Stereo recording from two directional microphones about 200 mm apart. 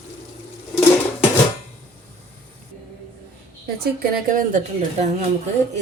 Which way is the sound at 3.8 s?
45° right (ahead or behind).